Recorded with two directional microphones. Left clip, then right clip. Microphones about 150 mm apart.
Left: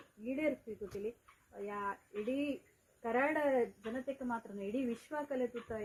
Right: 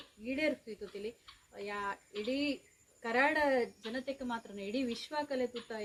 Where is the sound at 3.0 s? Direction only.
35° right (ahead or behind).